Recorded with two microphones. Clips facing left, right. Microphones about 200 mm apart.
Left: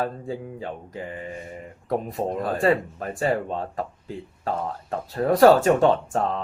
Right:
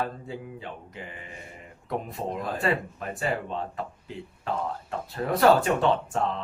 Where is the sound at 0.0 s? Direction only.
40° left (ahead or behind).